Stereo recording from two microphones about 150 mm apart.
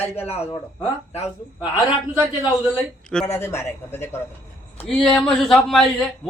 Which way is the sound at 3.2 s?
20° left (ahead or behind).